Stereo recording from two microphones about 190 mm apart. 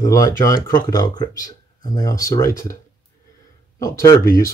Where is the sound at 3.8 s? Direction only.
15° left (ahead or behind).